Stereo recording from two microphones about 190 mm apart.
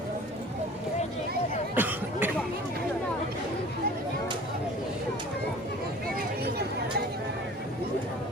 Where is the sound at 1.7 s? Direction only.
10° right (ahead or behind).